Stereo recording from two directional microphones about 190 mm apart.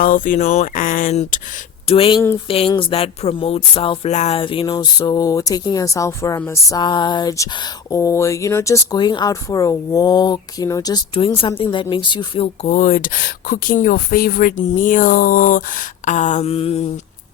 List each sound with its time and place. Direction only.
0.0 s speech: 45° left (ahead or behind)
1.9 s speech: 30° left (ahead or behind)
12.6 s speech: 45° left (ahead or behind)